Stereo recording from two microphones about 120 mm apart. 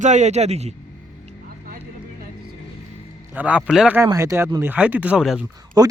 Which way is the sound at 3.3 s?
10° right (ahead or behind).